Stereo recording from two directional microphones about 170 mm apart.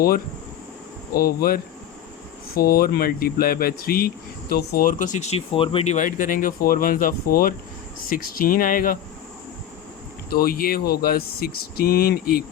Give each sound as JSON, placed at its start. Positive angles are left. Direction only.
{"t": 1.1, "sound": "speech", "side_deg": 60}
{"t": 10.2, "sound": "speech", "side_deg": 60}